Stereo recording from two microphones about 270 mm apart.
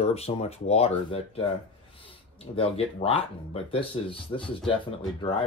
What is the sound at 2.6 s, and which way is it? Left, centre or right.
Speech, left.